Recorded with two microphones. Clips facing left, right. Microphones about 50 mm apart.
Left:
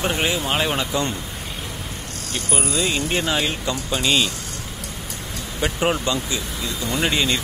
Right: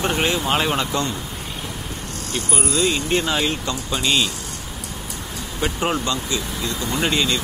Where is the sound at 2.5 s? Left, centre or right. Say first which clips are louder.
Right 2 dB; left.